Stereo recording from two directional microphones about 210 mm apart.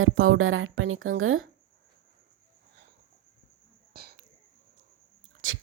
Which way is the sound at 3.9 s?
45° right (ahead or behind).